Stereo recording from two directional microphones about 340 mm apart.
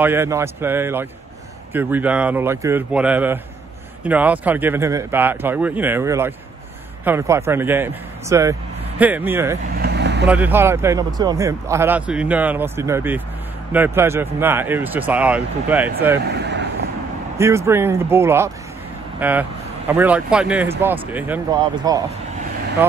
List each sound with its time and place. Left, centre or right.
0.0 s speech: centre
9.8 s vehicle: right
10.2 s speech: centre
16.3 s speech: right
17.4 s speech: centre